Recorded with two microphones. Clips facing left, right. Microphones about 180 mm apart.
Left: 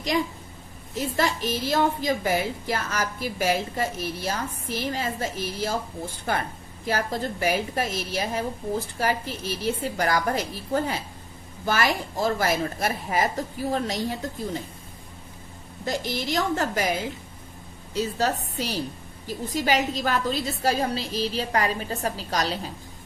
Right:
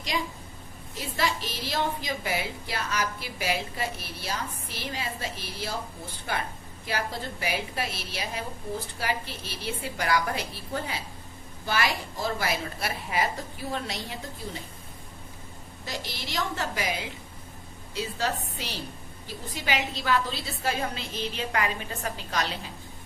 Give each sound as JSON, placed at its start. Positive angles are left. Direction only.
{"t": 0.1, "sound": "a woman's voice", "side_deg": 45}
{"t": 15.9, "sound": "a woman's voice", "side_deg": 50}